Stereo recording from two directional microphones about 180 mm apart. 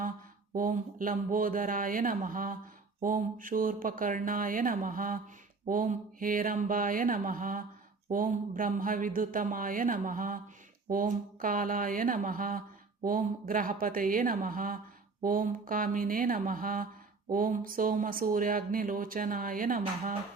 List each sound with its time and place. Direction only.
0.5 s speech: 50° right (ahead or behind)